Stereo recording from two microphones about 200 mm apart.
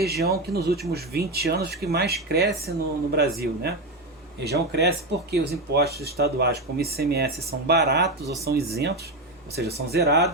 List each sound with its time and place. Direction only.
0.0 s speech: 50° right (ahead or behind)